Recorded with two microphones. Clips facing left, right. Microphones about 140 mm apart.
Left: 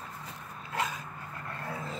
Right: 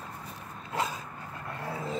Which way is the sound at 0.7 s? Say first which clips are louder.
Right 2 dB; 35° right (ahead or behind).